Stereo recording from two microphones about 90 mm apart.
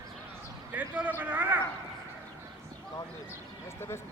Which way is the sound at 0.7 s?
20° right (ahead or behind).